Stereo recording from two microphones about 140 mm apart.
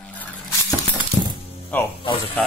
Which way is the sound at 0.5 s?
20° left (ahead or behind).